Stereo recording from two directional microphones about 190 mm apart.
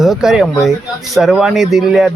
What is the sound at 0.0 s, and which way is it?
A man's voice, centre (ahead or behind).